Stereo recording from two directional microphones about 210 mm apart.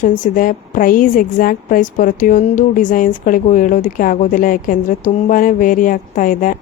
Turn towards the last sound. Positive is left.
turn(degrees=40)  # may be behind; listen again after turning